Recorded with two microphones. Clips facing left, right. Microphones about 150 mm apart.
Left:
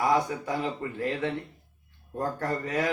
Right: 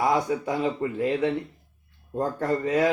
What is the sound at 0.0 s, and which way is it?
A man's voice, 20° right (ahead or behind).